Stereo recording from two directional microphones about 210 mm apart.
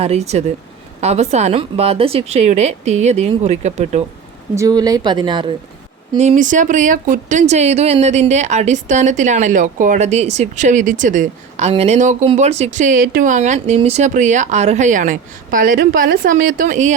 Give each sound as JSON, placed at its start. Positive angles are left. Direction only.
{"t": 0.0, "sound": "speech", "side_deg": -30}
{"t": 4.5, "sound": "speech", "side_deg": -15}
{"t": 6.1, "sound": "speech", "side_deg": -35}